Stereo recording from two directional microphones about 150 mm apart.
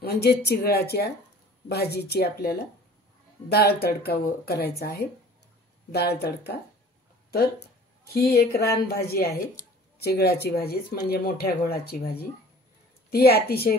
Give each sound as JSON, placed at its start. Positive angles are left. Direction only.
{"t": 0.0, "sound": "speech", "side_deg": 90}
{"t": 8.1, "sound": "speech", "side_deg": 90}